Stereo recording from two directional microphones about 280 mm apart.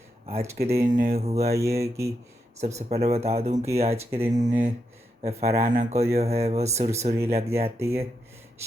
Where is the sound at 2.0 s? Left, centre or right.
Centre.